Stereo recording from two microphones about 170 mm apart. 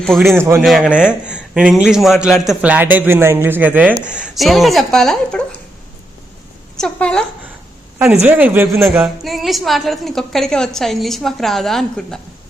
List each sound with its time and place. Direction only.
0.3 s a man's voice: 15° right (ahead or behind)
0.6 s a woman's voice: 5° right (ahead or behind)
6.7 s a woman's voice: 5° left (ahead or behind)
7.9 s a woman's voice: 5° right (ahead or behind)